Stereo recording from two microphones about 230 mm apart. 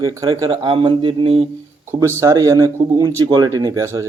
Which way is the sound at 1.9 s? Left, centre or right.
Centre.